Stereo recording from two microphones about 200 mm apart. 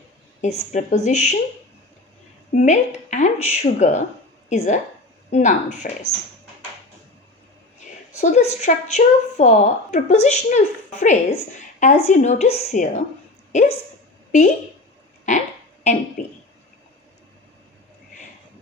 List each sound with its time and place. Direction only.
0.4 s a woman's voice: 35° left (ahead or behind)
2.6 s a woman's voice: 35° left (ahead or behind)
8.2 s a woman's voice: 35° left (ahead or behind)
15.3 s a woman's voice: 35° left (ahead or behind)